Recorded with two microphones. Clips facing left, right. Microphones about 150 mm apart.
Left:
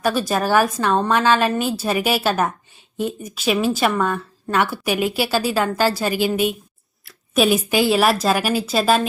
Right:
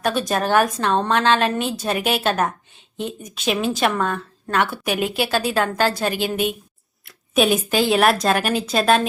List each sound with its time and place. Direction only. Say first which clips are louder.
0.0 s a woman's voice: left 1 dB; 5° left (ahead or behind)
7.0 s a sound: left 1 dB; centre (ahead or behind)
7.7 s speech: even; 5° left (ahead or behind)